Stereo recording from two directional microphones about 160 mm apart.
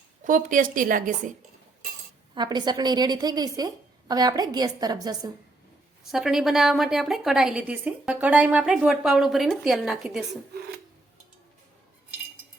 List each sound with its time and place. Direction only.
0.3 s a woman's voice: 55° right (ahead or behind)
2.3 s a woman's voice: 25° right (ahead or behind)
6.1 s a woman's voice: centre (ahead or behind)